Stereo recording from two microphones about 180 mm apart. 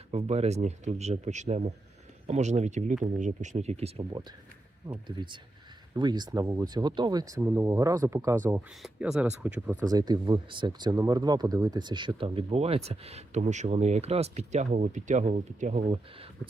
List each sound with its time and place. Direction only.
0.1 s speech: 35° right (ahead or behind); by 9.7 s 5° right (ahead or behind)
9.9 s speech: 20° right (ahead or behind); by 16.0 s 40° right (ahead or behind)